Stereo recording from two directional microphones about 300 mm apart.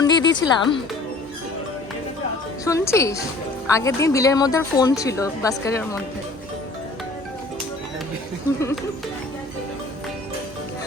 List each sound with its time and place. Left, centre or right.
0.0 s music: centre
0.3 s a woman's voice: centre
2.6 s a woman's voice: centre